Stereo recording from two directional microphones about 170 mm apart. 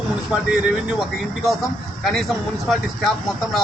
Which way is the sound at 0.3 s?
5° right (ahead or behind).